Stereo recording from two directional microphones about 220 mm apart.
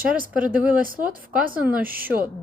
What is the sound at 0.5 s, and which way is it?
Speech, 5° right (ahead or behind).